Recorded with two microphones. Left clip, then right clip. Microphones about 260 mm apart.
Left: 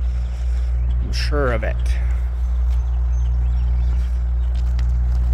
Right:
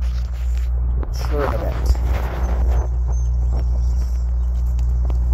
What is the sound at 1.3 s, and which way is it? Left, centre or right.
Speech, left.